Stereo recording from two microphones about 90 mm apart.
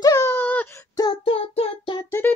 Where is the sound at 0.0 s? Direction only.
40° left (ahead or behind).